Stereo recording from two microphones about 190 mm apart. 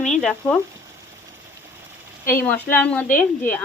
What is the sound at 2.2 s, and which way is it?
Speech, 10° left (ahead or behind).